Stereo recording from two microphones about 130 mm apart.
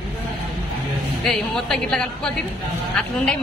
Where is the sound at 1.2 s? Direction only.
5° left (ahead or behind).